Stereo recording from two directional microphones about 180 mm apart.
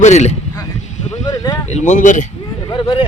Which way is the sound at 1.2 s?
20° left (ahead or behind).